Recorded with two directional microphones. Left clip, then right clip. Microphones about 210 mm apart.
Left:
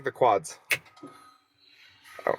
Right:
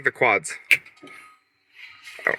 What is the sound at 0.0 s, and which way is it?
Speech, 20° right (ahead or behind).